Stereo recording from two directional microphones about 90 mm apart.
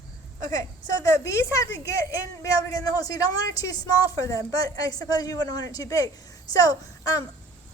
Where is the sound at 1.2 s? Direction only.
35° left (ahead or behind).